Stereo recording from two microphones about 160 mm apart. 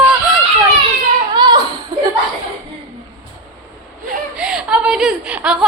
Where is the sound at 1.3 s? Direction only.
25° right (ahead or behind).